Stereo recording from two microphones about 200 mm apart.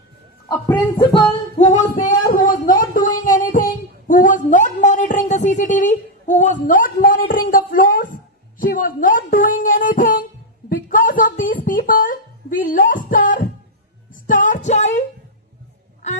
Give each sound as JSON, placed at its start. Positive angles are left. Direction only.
{"t": 0.4, "sound": "speech", "side_deg": 10}
{"t": 1.5, "sound": "a sound", "side_deg": 35}
{"t": 14.1, "sound": "music", "side_deg": 40}